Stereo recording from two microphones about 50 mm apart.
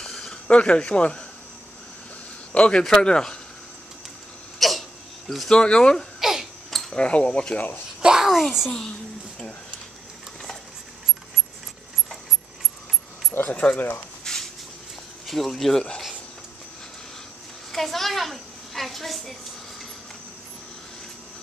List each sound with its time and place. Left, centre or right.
0.0 s a sound: centre
0.5 s speech: left
2.5 s a man's voice: left
4.6 s hiccup: centre
5.5 s a man's voice: centre
6.1 s babbling: centre
6.9 s speech: left
8.0 s a sound: centre
13.5 s speech: left
13.7 s speech: left
14.2 s dishes: centre
15.2 s speech: centre
17.7 s a child's voice: centre